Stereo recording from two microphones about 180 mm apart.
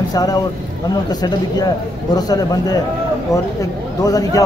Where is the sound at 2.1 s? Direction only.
20° left (ahead or behind).